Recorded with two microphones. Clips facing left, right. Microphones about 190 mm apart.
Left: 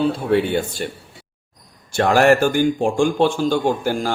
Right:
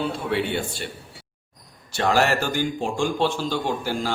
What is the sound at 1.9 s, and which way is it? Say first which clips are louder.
A man's voice: left 7 dB; 50° left (ahead or behind).